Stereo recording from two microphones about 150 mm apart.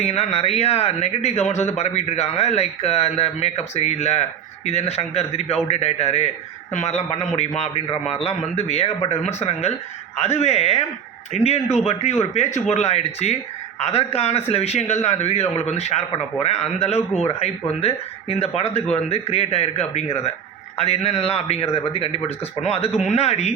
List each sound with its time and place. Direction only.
0.0 s a man's voice: 45° left (ahead or behind)